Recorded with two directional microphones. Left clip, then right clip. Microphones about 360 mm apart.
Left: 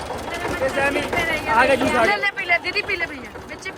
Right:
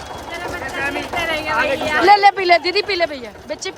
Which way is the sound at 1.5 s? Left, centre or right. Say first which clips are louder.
Left 3 dB; centre.